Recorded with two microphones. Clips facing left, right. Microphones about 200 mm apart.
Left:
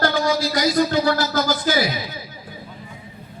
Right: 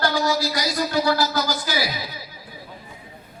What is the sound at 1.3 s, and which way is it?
Speech, 50° left (ahead or behind).